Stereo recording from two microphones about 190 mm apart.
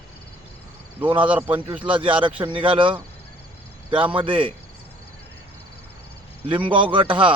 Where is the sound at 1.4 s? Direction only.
10° right (ahead or behind).